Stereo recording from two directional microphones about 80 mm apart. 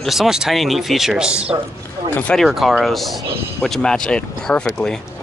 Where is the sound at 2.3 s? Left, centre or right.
Centre.